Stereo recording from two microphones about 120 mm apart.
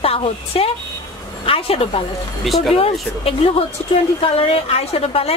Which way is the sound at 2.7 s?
55° left (ahead or behind).